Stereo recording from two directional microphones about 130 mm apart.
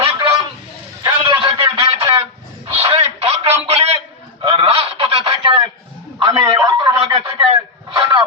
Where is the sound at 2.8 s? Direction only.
50° right (ahead or behind).